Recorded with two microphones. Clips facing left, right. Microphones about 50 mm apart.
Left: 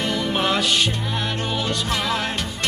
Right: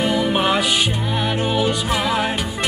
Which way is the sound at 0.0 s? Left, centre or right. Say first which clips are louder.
Right 4 dB; centre.